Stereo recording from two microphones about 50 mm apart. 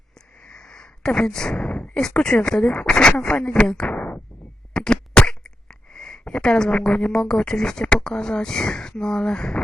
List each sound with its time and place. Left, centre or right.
0.4 s speech: centre
3.9 s a sound: left
4.7 s speech: centre